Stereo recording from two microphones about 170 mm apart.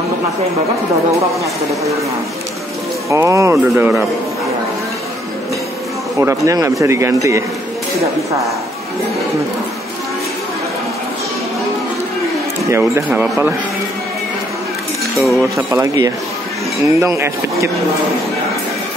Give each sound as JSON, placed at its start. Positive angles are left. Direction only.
{"t": 3.1, "sound": "speech", "side_deg": -15}
{"t": 6.1, "sound": "speech", "side_deg": -20}
{"t": 12.6, "sound": "speech", "side_deg": -15}
{"t": 15.1, "sound": "speech", "side_deg": 0}
{"t": 15.5, "sound": "speech", "side_deg": -15}